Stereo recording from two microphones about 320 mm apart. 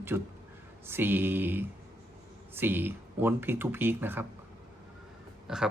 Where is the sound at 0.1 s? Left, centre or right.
Centre.